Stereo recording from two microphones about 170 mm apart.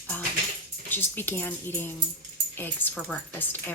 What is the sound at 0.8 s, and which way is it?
A woman's voice, 10° left (ahead or behind).